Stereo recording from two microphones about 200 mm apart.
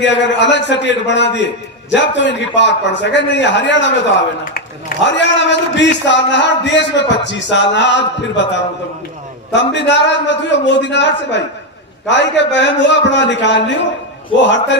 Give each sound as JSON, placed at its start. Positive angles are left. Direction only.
{"t": 0.0, "sound": "a man's voice", "side_deg": 65}